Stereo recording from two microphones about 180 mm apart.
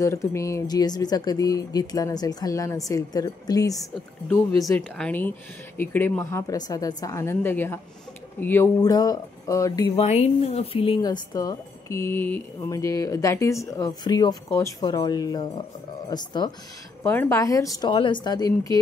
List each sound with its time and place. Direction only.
0.0 s a woman's voice: 15° left (ahead or behind)
9.9 s speech: 35° left (ahead or behind)
17.0 s speech: 15° left (ahead or behind)